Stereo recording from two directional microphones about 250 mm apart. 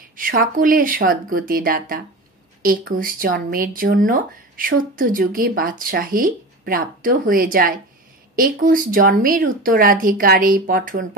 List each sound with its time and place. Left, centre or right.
0.1 s speech: right